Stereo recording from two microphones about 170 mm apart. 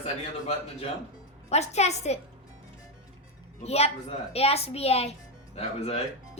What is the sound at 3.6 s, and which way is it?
A child's voice, 40° left (ahead or behind).